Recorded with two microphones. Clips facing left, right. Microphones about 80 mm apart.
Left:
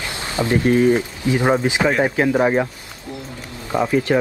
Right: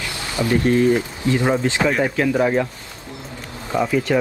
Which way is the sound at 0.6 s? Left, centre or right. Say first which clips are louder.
Left 2 dB; centre.